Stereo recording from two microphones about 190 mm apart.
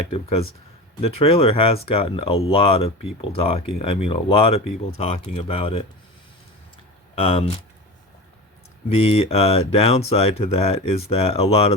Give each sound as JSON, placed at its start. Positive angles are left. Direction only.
{"t": 0.1, "sound": "speech", "side_deg": 30}
{"t": 7.2, "sound": "speech", "side_deg": 30}
{"t": 9.0, "sound": "speech", "side_deg": 30}